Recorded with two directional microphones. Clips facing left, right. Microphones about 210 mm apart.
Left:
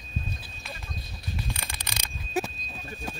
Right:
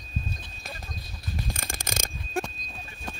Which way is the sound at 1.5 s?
45° right (ahead or behind).